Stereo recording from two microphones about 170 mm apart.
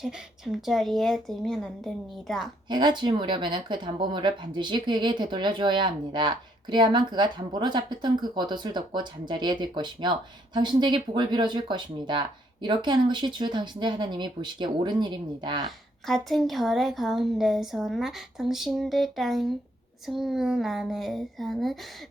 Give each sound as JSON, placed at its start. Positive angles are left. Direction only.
{"t": 0.0, "sound": "a woman's voice", "side_deg": 0}
{"t": 2.6, "sound": "speech", "side_deg": -25}
{"t": 15.6, "sound": "a woman's voice", "side_deg": 0}